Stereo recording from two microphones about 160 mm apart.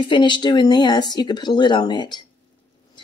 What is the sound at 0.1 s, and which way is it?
Speech, 30° left (ahead or behind).